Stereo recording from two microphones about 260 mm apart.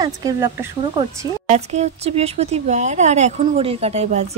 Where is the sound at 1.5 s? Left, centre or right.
Right.